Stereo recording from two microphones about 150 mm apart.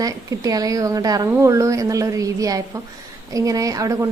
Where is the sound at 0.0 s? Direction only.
25° right (ahead or behind).